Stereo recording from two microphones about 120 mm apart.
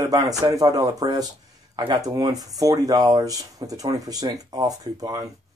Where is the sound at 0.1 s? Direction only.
30° right (ahead or behind).